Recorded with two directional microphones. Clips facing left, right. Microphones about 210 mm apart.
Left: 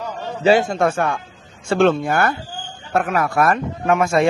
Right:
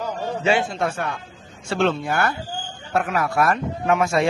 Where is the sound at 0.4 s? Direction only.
40° left (ahead or behind).